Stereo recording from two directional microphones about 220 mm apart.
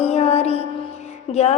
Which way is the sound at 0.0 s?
30° left (ahead or behind).